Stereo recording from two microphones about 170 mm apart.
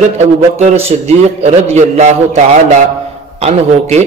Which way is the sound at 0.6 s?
40° right (ahead or behind).